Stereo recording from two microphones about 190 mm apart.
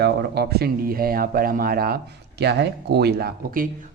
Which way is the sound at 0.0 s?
60° right (ahead or behind).